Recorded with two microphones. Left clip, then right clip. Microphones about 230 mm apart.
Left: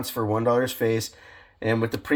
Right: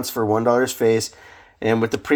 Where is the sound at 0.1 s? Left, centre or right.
Right.